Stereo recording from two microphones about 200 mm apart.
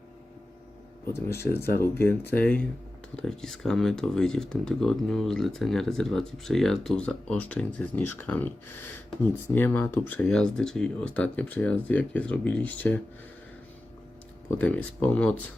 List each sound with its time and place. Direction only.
1.1 s speech: 15° left (ahead or behind)
9.6 s speech: 10° left (ahead or behind)
14.6 s speech: 5° left (ahead or behind)